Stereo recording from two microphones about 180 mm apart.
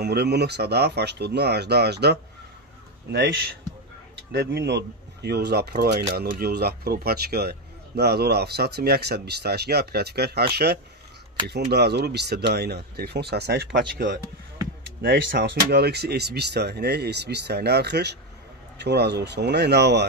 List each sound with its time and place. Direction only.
0.0 s speech: 65° right (ahead or behind)
15.0 s speech: 65° right (ahead or behind)